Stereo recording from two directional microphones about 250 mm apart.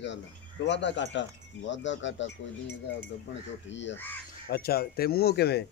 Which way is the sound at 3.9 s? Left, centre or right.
Centre.